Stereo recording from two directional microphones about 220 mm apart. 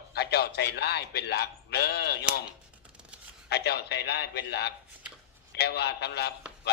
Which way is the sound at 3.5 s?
50° left (ahead or behind).